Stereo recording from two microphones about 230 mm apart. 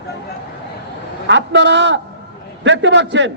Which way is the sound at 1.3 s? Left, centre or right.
Right.